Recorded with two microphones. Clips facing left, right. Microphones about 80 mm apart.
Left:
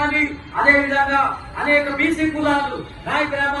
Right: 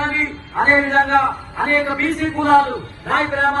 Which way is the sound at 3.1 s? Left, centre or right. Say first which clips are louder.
Right 2 dB; right.